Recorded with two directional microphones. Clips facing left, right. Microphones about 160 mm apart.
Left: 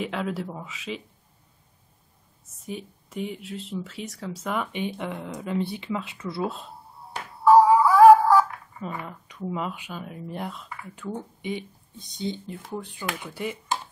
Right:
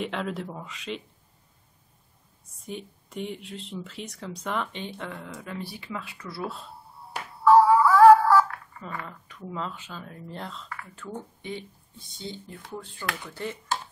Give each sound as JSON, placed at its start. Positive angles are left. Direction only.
{"t": 0.0, "sound": "speech", "side_deg": 5}
{"t": 2.6, "sound": "speech", "side_deg": 0}